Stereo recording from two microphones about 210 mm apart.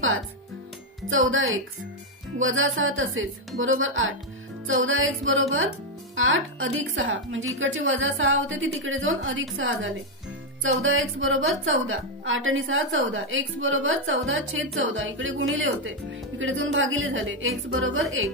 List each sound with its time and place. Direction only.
1.0 s a woman's voice: 70° right (ahead or behind)